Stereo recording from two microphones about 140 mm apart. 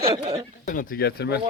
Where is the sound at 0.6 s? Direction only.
80° left.